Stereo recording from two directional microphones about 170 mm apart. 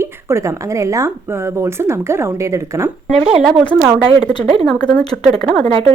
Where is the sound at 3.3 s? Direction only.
Centre (ahead or behind).